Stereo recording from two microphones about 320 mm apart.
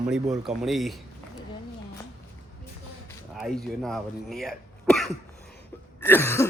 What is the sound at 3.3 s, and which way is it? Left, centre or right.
Speech, centre.